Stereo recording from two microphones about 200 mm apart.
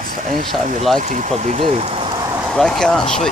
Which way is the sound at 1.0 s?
35° right (ahead or behind).